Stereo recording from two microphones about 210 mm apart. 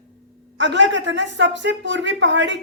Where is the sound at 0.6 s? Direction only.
60° right (ahead or behind).